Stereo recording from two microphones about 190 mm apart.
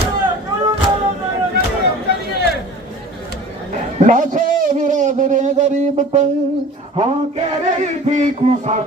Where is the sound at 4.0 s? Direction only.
45° right (ahead or behind).